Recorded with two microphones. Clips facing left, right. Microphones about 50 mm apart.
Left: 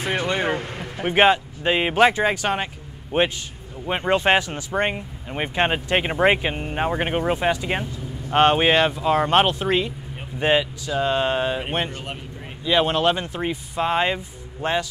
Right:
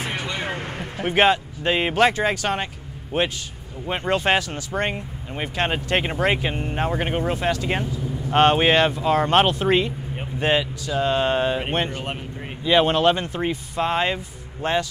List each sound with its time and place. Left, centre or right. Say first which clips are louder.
0.3 s a sound: left 5 dB; left
0.9 s speech: left 1 dB; centre
7.8 s speech: right 4 dB; centre
11.9 s speech: right 3 dB; right
12.6 s speech: right 2 dB; centre